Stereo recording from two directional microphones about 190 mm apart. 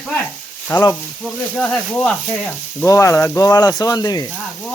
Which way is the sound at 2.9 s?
15° left (ahead or behind).